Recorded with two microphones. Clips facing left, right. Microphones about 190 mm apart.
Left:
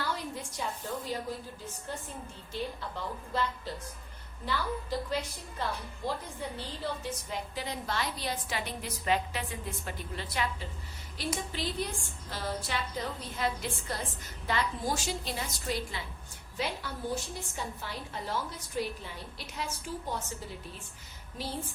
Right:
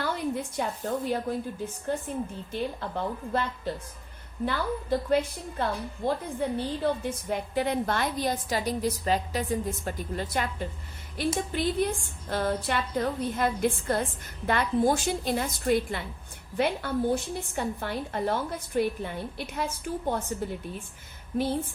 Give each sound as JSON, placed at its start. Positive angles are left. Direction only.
{"t": 0.0, "sound": "a woman's voice", "side_deg": -55}
{"t": 2.5, "sound": "a woman's voice", "side_deg": -55}